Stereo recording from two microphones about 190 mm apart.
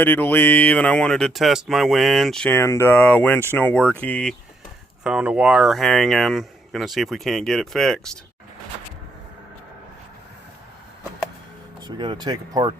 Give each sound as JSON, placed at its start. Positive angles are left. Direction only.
{"t": 0.0, "sound": "speech", "side_deg": 10}
{"t": 5.0, "sound": "speech", "side_deg": -5}
{"t": 11.9, "sound": "speech", "side_deg": -20}